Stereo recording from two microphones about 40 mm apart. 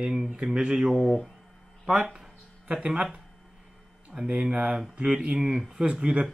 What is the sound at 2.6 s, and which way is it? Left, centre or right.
A man's voice, right.